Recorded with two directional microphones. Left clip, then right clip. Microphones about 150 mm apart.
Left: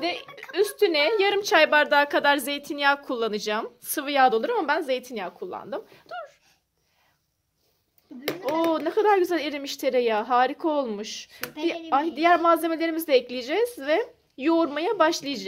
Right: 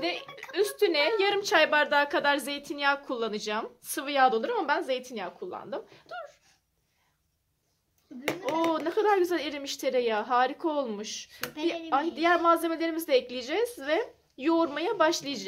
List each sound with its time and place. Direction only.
0.4 s a woman's voice: 40° left (ahead or behind)
8.3 s a sound: 10° left (ahead or behind)
8.7 s a woman's voice: 50° left (ahead or behind)